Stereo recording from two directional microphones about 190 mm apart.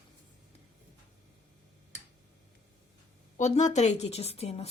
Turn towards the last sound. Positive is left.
turn(degrees=35)  # may be behind; listen again after turning